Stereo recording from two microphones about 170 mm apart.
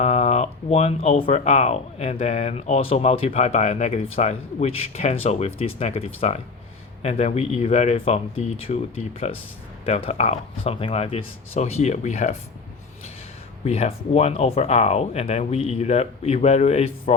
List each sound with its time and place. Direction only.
0.0 s speech: 40° left (ahead or behind)
9.8 s speech: 35° left (ahead or behind)
13.7 s speech: 40° left (ahead or behind)